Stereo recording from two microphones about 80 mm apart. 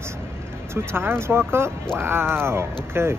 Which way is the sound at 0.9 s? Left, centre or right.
Right.